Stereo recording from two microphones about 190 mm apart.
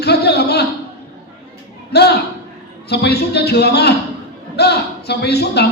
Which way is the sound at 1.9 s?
60° left (ahead or behind).